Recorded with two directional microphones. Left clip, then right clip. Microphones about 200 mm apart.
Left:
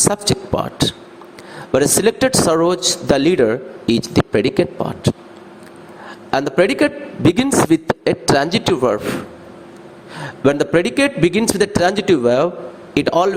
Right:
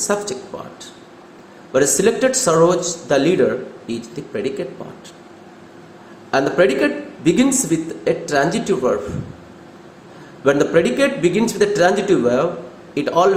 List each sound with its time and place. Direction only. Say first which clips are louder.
0.1 s a man's voice: left 3 dB; 50° left (ahead or behind)
6.3 s a man's voice: even; 50° left (ahead or behind)
10.4 s a man's voice: even; 45° left (ahead or behind)